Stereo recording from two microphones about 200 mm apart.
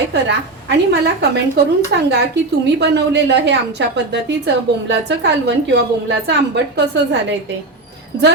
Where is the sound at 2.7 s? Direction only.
60° right (ahead or behind).